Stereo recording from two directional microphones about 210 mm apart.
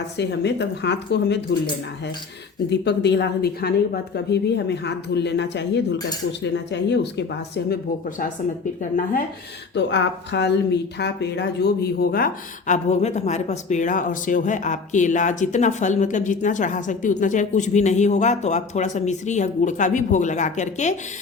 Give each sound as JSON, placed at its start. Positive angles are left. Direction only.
{"t": 0.2, "sound": "speech", "side_deg": 55}
{"t": 2.6, "sound": "speech", "side_deg": 55}
{"t": 8.8, "sound": "speech", "side_deg": 40}
{"t": 9.7, "sound": "speech", "side_deg": 55}